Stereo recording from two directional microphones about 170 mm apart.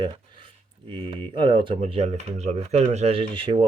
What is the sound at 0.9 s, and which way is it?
Speech, 30° right (ahead or behind).